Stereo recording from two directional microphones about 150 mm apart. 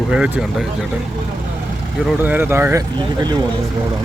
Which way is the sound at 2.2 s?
15° right (ahead or behind).